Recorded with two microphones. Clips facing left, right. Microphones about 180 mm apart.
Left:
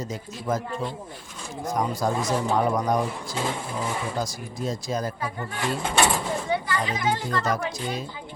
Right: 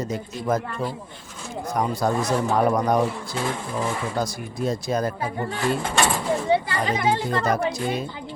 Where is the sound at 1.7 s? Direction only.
60° right (ahead or behind).